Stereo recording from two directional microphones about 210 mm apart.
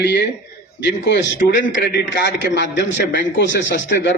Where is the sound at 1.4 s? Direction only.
40° left (ahead or behind).